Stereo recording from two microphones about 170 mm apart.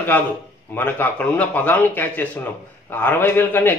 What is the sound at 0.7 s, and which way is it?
A man's voice, 10° left (ahead or behind).